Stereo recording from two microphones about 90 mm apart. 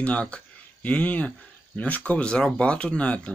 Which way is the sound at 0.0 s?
15° left (ahead or behind).